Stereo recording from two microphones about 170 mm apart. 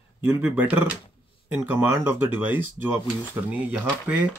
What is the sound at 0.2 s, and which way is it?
Speech, 10° right (ahead or behind).